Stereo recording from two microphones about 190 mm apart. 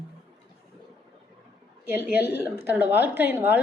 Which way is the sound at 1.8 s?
10° right (ahead or behind).